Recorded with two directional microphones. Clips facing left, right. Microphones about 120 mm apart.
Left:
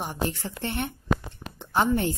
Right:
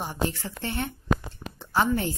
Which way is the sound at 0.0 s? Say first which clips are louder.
Even; 15° left (ahead or behind).